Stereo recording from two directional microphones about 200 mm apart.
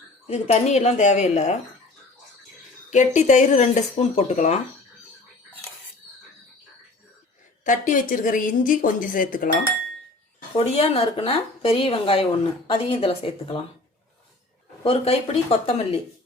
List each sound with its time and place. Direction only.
0.3 s speech: 30° left (ahead or behind)
2.9 s speech: 35° left (ahead or behind)
7.6 s a woman's voice: 40° left (ahead or behind)
10.6 s speech: 30° left (ahead or behind)
14.8 s speech: 30° left (ahead or behind)